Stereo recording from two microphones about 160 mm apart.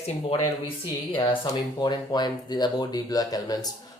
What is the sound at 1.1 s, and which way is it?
Speech, 30° left (ahead or behind).